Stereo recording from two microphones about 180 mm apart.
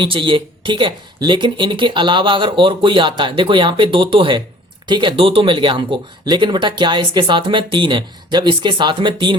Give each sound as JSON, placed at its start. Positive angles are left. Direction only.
{"t": 0.0, "sound": "speech", "side_deg": -30}